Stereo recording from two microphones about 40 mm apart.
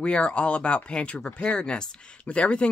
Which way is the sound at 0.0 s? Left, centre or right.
Left.